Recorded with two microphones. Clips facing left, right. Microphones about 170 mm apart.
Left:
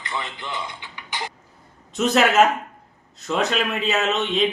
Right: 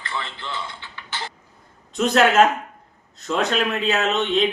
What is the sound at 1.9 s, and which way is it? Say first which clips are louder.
A man's voice: right 1 dB; centre (ahead or behind).